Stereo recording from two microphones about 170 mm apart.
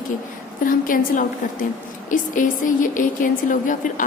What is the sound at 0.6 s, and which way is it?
A woman's voice, 50° left (ahead or behind).